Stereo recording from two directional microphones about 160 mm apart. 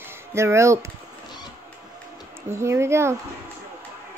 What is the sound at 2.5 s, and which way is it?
Speech, 15° right (ahead or behind).